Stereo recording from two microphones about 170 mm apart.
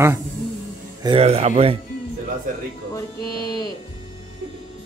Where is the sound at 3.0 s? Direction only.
25° left (ahead or behind).